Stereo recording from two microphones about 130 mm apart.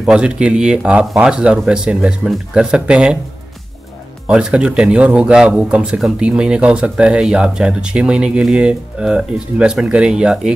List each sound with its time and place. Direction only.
0.0 s speech: 5° right (ahead or behind)
4.3 s speech: 5° right (ahead or behind)